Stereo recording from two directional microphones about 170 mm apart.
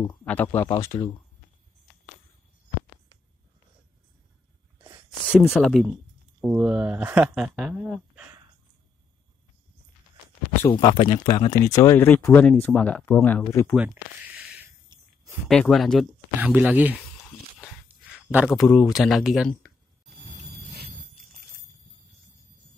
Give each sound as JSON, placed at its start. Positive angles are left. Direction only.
{"t": 0.2, "sound": "speech", "side_deg": 10}
{"t": 5.5, "sound": "speech", "side_deg": 0}
{"t": 10.7, "sound": "speech", "side_deg": 25}
{"t": 13.7, "sound": "a sound", "side_deg": -5}
{"t": 15.4, "sound": "speech", "side_deg": 5}
{"t": 16.3, "sound": "speech", "side_deg": -10}
{"t": 18.3, "sound": "speech", "side_deg": -5}